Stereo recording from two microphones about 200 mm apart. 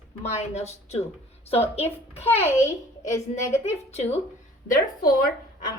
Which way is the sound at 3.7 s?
30° left (ahead or behind).